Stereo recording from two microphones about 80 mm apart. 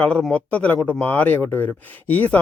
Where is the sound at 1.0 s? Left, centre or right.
Left.